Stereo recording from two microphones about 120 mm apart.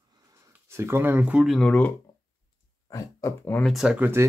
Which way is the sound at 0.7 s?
20° right (ahead or behind).